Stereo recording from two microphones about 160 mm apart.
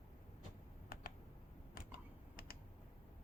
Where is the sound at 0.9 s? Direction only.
65° left (ahead or behind).